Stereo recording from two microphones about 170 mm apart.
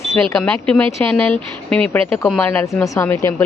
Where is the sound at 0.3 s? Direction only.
5° left (ahead or behind).